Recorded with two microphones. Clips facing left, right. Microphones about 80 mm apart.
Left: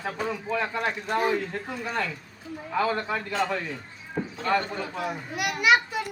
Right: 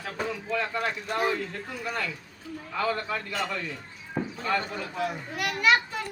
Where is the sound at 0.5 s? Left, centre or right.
Left.